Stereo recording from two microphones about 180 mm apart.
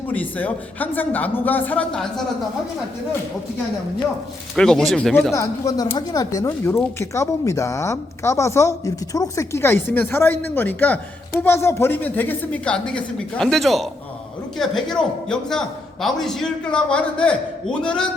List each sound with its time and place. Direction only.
0.1 s speech: 10° left (ahead or behind)
4.5 s a man's voice: 5° left (ahead or behind)
5.3 s a man's voice: 20° left (ahead or behind)